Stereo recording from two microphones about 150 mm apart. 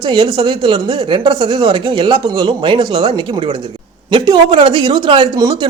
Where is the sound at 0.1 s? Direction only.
35° right (ahead or behind).